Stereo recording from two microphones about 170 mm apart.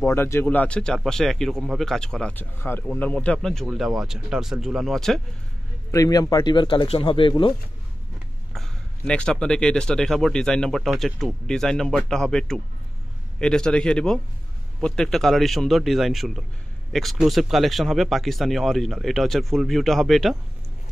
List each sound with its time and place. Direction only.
0.0 s speech: 15° left (ahead or behind)
5.9 s speech: 20° left (ahead or behind)
8.5 s speech: 5° left (ahead or behind)